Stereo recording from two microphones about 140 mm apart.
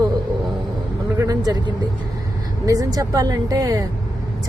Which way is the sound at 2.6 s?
25° right (ahead or behind).